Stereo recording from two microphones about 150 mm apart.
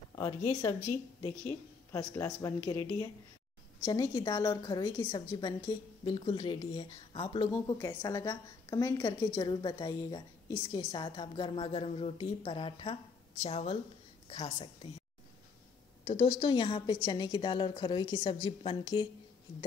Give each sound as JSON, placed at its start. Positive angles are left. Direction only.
{"t": 0.1, "sound": "a sound", "side_deg": 25}
{"t": 0.5, "sound": "a woman's voice", "side_deg": 20}
{"t": 1.9, "sound": "a woman's voice", "side_deg": 20}
{"t": 7.5, "sound": "a woman's voice", "side_deg": 25}
{"t": 16.0, "sound": "a woman's voice", "side_deg": 35}